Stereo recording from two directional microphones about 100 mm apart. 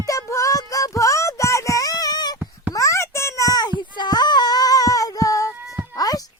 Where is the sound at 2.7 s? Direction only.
30° left (ahead or behind).